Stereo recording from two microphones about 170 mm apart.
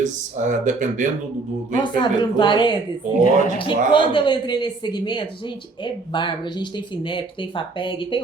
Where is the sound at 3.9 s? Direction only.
25° left (ahead or behind).